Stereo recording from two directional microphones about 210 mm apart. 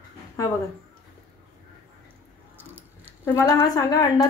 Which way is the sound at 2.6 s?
10° right (ahead or behind).